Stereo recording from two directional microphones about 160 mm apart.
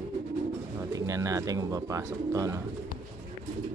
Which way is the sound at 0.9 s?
20° right (ahead or behind).